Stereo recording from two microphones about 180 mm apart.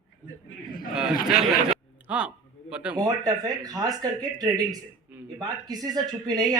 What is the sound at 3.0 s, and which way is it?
Speech, 20° right (ahead or behind).